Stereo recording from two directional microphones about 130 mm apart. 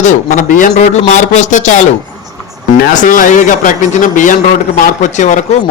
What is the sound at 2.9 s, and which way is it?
A man's voice, 90° left.